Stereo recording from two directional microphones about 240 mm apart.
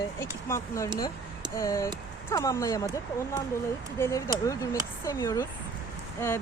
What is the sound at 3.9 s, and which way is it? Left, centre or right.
Speech, centre.